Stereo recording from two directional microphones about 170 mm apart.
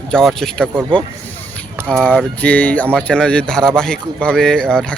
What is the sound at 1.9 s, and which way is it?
Speech, 5° left (ahead or behind).